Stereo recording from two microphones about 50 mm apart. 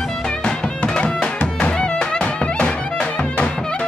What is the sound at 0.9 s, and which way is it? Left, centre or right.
Music, centre.